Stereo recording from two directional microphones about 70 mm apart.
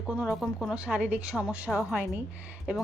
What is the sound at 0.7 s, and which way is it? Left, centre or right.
A woman's voice, centre.